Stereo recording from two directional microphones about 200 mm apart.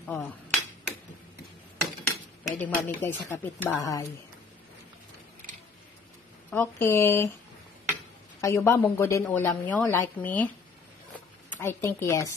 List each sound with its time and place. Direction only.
0.0 s speech: centre (ahead or behind)
2.0 s speech: 10° left (ahead or behind)
6.5 s speech: 10° left (ahead or behind)
7.9 s dishes: 15° left (ahead or behind)
9.2 s speech: 10° left (ahead or behind)
11.6 s speech: 15° left (ahead or behind)